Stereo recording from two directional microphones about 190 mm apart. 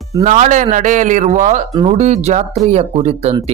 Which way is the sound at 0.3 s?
40° right (ahead or behind).